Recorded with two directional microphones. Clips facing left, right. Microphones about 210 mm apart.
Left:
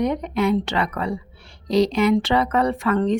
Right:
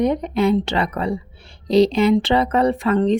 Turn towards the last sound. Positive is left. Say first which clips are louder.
# right 3 dB
turn(degrees=-25)  # may be behind; listen again after turning